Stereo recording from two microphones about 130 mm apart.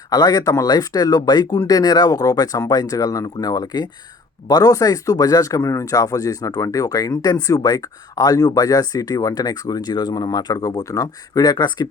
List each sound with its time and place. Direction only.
0.1 s speech: 30° left (ahead or behind)